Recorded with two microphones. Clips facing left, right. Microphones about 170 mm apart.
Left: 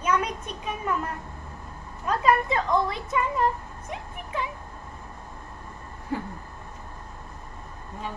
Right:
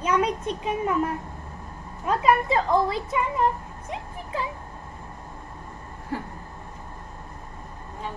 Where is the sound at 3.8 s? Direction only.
30° right (ahead or behind).